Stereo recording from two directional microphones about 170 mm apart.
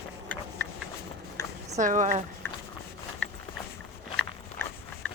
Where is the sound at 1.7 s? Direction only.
50° right (ahead or behind).